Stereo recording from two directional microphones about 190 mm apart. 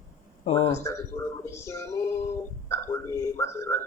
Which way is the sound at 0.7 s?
15° left (ahead or behind).